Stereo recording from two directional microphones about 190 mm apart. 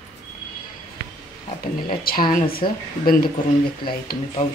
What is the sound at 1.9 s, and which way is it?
Speech, 50° left (ahead or behind).